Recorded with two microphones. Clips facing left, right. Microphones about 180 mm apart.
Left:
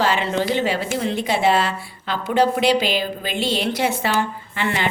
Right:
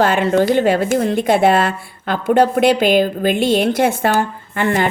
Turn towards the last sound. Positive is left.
turn(degrees=-45)  # may be behind; listen again after turning